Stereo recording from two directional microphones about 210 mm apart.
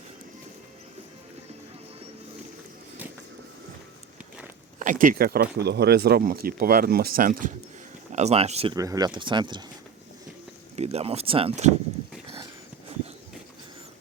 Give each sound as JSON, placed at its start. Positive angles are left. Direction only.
{"t": 4.8, "sound": "speech", "side_deg": -40}
{"t": 8.7, "sound": "speech", "side_deg": -15}
{"t": 10.8, "sound": "speech", "side_deg": -30}